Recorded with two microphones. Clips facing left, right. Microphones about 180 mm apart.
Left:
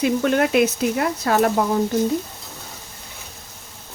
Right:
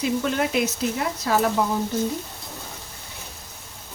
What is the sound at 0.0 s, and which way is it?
Speech, 60° left (ahead or behind).